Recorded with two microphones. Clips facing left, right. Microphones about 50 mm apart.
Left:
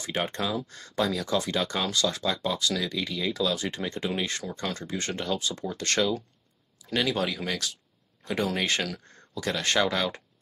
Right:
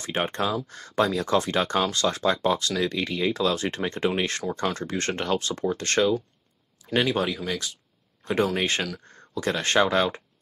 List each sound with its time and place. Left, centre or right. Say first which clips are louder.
0.0 s speech: right 3 dB; right
4.5 s speech: right 6 dB; right
4.7 s speech: right 4 dB; right